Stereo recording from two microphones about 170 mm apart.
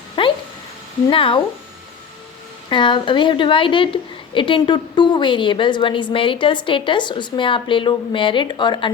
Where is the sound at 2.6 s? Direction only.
25° left (ahead or behind).